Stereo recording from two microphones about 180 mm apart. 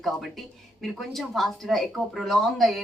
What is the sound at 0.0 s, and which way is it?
A woman's voice, centre (ahead or behind).